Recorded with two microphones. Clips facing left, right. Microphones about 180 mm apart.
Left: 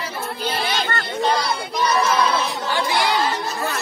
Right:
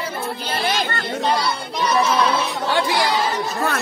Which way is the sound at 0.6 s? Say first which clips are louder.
Right 5 dB; 45° right (ahead or behind).